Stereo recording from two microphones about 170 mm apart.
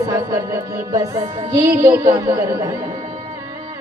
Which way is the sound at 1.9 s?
15° right (ahead or behind).